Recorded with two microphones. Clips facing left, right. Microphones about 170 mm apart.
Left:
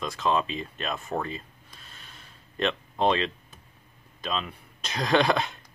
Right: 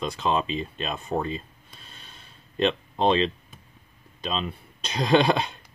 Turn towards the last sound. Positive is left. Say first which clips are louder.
# right 3 dB
turn(degrees=-25)  # may be behind; listen again after turning